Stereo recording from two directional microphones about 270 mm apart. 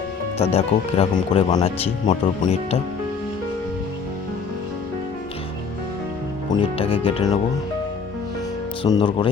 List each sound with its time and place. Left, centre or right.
0.5 s speech: left
6.5 s speech: left
8.8 s speech: centre